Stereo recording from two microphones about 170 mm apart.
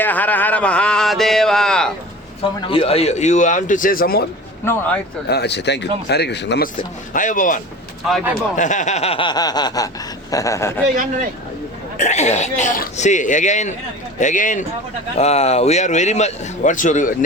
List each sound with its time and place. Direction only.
0.0 s speech: 10° left (ahead or behind)
2.4 s a man's voice: 35° left (ahead or behind); by 4.3 s 60° left (ahead or behind)
4.6 s speech: 10° left (ahead or behind)
5.3 s speech: 80° left
7.1 s a man's voice: 50° left (ahead or behind); by 10.8 s 15° left (ahead or behind)
11.9 s a man's voice: 45° left (ahead or behind)
15.1 s a man's voice: 40° left (ahead or behind)